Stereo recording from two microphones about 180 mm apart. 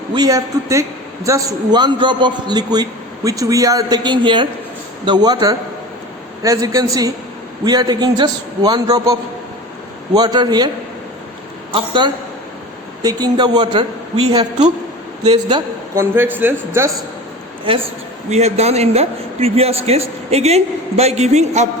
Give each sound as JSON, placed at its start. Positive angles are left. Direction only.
{"t": 0.1, "sound": "a man's voice", "side_deg": -20}
{"t": 10.2, "sound": "a man's voice", "side_deg": -25}
{"t": 11.7, "sound": "a man's voice", "side_deg": -25}
{"t": 15.2, "sound": "a woman's voice", "side_deg": -25}
{"t": 16.1, "sound": "speech", "side_deg": -10}
{"t": 17.7, "sound": "a man's voice", "side_deg": -30}